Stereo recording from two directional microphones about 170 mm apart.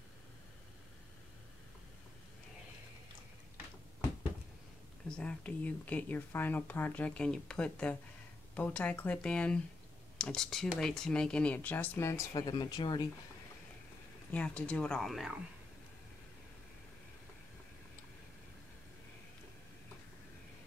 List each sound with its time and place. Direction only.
5.1 s speech: 5° left (ahead or behind)
12.3 s speech: 25° left (ahead or behind)
14.3 s speech: 5° left (ahead or behind)